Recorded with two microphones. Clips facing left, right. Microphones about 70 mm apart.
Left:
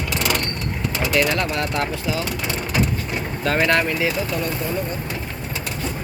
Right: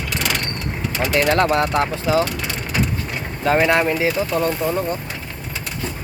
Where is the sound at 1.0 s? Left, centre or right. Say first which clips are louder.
Right 4 dB; right.